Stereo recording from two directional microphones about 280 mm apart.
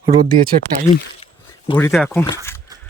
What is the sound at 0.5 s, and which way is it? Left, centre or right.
Speech, right.